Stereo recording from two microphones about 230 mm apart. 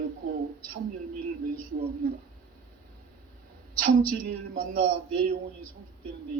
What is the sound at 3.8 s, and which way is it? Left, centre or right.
A man's voice, right.